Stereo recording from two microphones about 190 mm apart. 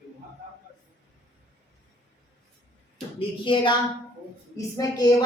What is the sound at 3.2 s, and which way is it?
A woman's voice, 25° left (ahead or behind).